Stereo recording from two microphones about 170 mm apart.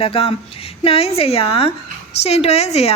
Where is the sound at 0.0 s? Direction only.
35° left (ahead or behind).